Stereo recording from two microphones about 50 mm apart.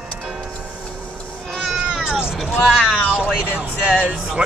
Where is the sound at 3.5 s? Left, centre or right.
Right.